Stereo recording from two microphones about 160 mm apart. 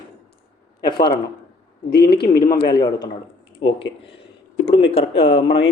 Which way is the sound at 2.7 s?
25° left (ahead or behind).